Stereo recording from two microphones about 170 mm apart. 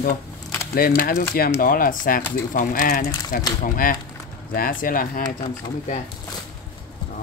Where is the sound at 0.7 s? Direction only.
60° left (ahead or behind).